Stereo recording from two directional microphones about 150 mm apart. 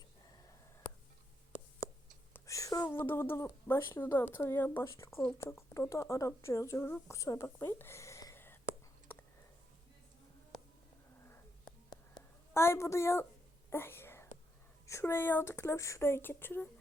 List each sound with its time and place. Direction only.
2.3 s a sound: 20° left (ahead or behind)
3.0 s speech: 15° left (ahead or behind)
12.5 s speech: 15° left (ahead or behind)
13.7 s whispering: 15° left (ahead or behind)
14.8 s speech: 20° left (ahead or behind)